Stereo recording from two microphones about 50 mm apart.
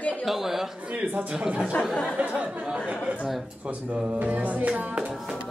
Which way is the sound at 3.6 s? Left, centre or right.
Right.